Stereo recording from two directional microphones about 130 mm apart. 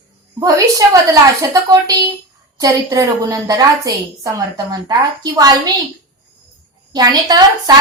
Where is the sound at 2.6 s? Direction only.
25° right (ahead or behind).